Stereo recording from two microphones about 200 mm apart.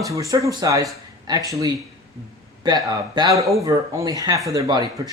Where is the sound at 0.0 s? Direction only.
15° right (ahead or behind).